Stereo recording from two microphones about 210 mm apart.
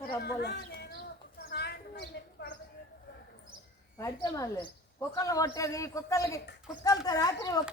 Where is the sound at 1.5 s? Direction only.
50° left (ahead or behind).